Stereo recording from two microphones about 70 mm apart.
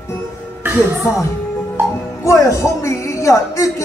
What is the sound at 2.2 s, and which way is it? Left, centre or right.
Speech, left.